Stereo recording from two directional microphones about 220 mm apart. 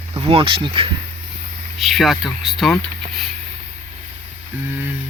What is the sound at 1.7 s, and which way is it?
Speech, centre (ahead or behind).